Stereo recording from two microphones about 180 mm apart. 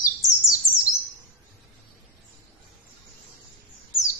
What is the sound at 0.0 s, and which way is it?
Bird, 20° left (ahead or behind).